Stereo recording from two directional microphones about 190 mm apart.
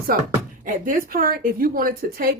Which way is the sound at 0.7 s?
45° right (ahead or behind).